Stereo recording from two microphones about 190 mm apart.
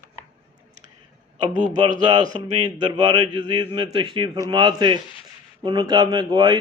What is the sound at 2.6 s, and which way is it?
A man's voice, 25° right (ahead or behind).